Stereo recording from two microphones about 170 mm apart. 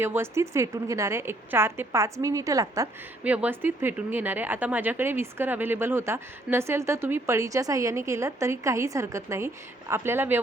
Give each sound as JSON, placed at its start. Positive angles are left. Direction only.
{"t": 0.0, "sound": "a woman's voice", "side_deg": -15}
{"t": 3.2, "sound": "a woman's voice", "side_deg": -10}